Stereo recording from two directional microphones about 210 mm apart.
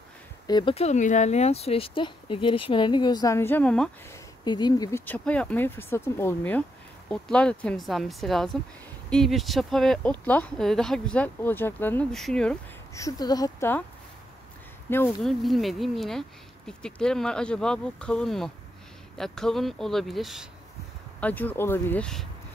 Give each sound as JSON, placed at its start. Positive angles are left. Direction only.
{"t": 0.5, "sound": "speech", "side_deg": 20}
{"t": 4.5, "sound": "speech", "side_deg": 20}
{"t": 12.9, "sound": "speech", "side_deg": 15}
{"t": 14.9, "sound": "speech", "side_deg": 10}
{"t": 15.2, "sound": "speech", "side_deg": 0}